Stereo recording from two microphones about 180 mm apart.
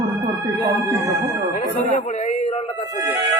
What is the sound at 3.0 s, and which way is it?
Speech, 15° right (ahead or behind).